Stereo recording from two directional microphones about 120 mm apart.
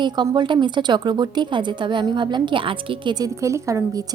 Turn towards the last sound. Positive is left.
turn(degrees=-25)  # may be behind; listen again after turning